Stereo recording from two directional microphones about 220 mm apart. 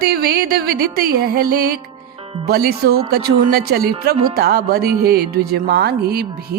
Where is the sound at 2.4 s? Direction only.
45° right (ahead or behind).